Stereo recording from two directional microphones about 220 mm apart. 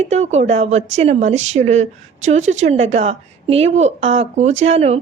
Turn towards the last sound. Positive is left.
turn(degrees=-30)  # may be behind; listen again after turning